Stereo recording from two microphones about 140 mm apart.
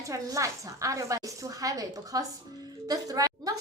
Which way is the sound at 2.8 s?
25° right (ahead or behind).